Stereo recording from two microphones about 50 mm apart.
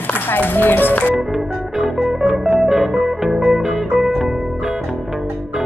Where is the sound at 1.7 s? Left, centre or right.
Centre.